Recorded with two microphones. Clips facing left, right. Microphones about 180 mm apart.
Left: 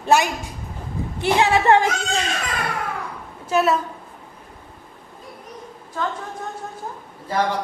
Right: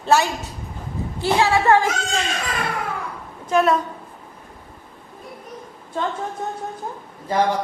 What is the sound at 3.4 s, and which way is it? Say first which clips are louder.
Speech: right 1 dB; 5° left (ahead or behind).